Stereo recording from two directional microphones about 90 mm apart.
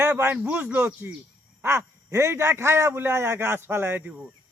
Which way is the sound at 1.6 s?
25° right (ahead or behind).